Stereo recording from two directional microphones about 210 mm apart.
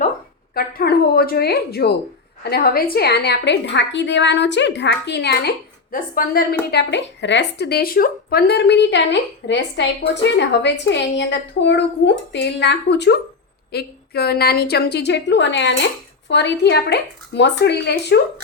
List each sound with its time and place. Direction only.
0.5 s a woman's voice: 45° left (ahead or behind)
6.7 s a woman's voice: 55° left (ahead or behind)